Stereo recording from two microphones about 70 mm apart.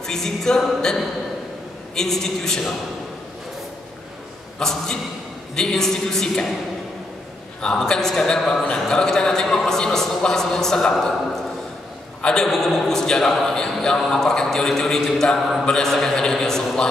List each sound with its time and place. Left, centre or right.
0.0 s speech: centre
4.6 s speech: centre
7.6 s speech: centre